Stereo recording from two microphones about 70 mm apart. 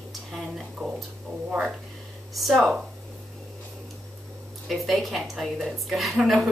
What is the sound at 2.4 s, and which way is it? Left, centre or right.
Speech, centre.